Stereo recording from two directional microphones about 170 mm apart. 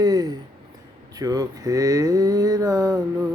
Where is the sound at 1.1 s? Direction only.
20° right (ahead or behind).